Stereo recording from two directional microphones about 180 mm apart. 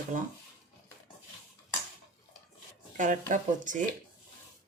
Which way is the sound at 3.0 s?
45° right (ahead or behind).